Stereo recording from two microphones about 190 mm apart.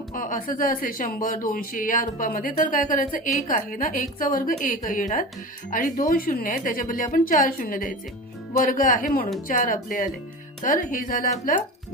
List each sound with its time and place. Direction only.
0.1 s speech: 45° left (ahead or behind)